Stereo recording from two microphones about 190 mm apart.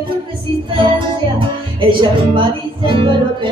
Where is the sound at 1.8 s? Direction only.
25° right (ahead or behind).